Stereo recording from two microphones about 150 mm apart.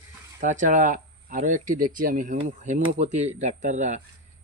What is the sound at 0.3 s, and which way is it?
Speech, 60° right (ahead or behind).